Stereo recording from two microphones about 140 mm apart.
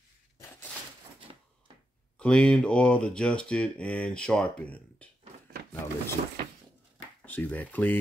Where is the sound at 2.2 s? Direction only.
5° left (ahead or behind).